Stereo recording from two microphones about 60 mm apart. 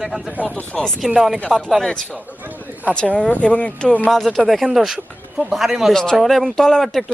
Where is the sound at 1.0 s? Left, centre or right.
Centre.